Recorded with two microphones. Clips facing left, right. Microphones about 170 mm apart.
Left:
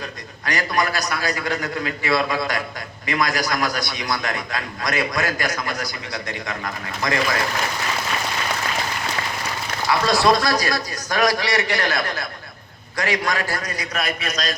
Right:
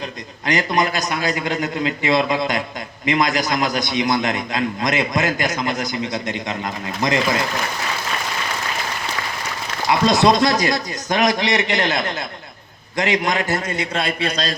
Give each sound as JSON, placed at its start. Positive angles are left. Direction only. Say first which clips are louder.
{"t": 0.4, "sound": "a man's voice", "louder": "right 3 dB", "side_deg": -20}
{"t": 9.9, "sound": "a man's voice", "louder": "right 2 dB", "side_deg": -20}